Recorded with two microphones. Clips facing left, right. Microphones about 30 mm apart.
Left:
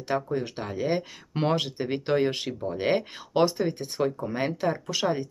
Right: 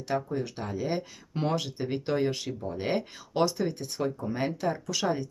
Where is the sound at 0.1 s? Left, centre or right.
Left.